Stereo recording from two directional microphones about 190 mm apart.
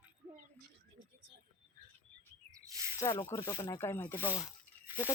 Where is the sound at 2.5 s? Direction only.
15° right (ahead or behind).